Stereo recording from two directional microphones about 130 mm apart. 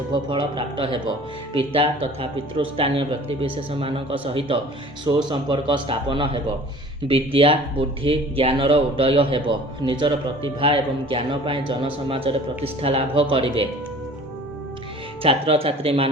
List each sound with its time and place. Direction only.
0.1 s a man's voice: 40° right (ahead or behind)
15.2 s speech: 45° right (ahead or behind)